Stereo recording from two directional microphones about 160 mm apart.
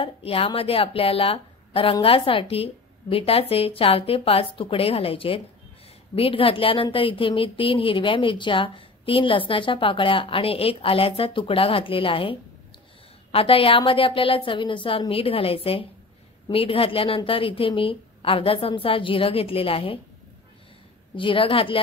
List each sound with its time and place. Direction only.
0.0 s a woman's voice: 35° left (ahead or behind)
21.2 s a woman's voice: 30° left (ahead or behind)